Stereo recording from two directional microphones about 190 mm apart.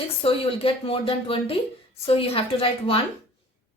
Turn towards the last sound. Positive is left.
turn(degrees=30)  # may be behind; listen again after turning